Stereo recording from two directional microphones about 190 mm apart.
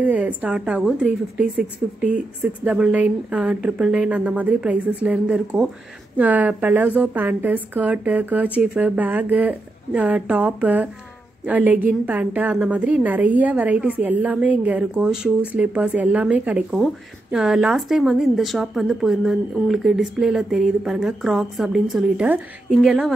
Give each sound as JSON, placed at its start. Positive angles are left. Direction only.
{"t": 0.0, "sound": "a woman's voice", "side_deg": -10}